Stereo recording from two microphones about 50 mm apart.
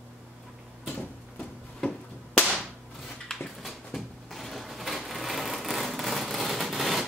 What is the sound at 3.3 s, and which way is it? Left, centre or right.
Dog, centre.